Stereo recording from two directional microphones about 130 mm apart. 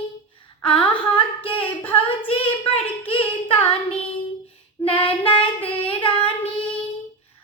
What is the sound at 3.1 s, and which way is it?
Singing, 45° left (ahead or behind).